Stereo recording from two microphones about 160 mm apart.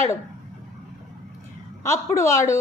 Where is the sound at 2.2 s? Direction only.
20° left (ahead or behind).